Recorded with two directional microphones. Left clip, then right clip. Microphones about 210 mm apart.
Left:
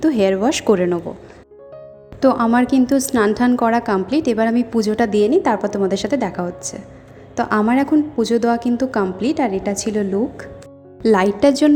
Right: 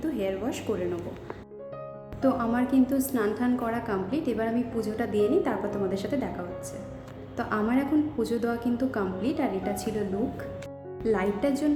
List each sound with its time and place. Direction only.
0.0 s speech: 40° left (ahead or behind)
2.2 s a woman's voice: 40° left (ahead or behind)